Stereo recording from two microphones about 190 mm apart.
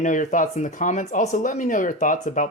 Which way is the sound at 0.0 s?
40° left (ahead or behind).